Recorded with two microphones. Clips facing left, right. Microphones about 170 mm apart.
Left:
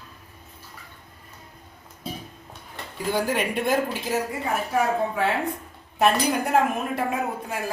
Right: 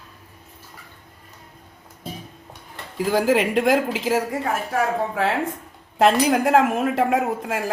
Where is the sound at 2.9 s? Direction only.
90° right.